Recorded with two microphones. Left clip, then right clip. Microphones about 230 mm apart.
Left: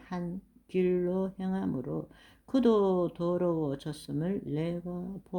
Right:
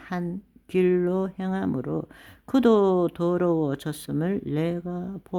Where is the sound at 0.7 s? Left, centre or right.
Right.